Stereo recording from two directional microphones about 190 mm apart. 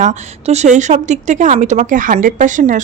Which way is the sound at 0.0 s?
35° right (ahead or behind).